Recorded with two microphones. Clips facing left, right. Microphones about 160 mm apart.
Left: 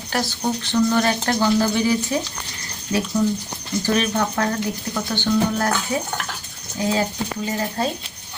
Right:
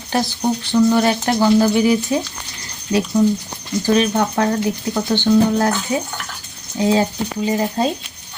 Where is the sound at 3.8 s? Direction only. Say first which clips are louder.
Right 5 dB; 20° right (ahead or behind).